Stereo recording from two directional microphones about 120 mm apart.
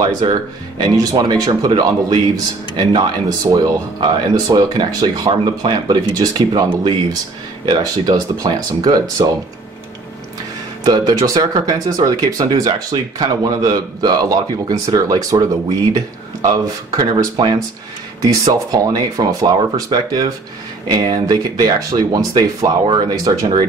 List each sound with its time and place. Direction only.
0.0 s speech: 35° right (ahead or behind)
10.8 s speech: 30° right (ahead or behind)